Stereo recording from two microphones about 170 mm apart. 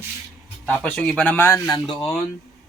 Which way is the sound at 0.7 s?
5° left (ahead or behind).